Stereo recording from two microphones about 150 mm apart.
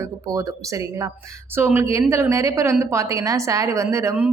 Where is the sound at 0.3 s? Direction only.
20° right (ahead or behind).